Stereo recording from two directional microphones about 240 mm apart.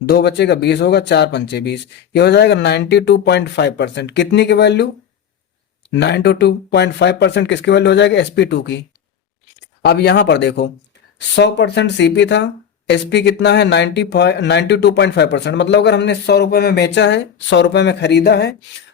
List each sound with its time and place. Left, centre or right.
0.0 s speech: left
9.8 s speech: left